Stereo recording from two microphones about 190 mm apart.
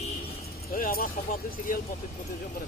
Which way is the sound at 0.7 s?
50° left (ahead or behind).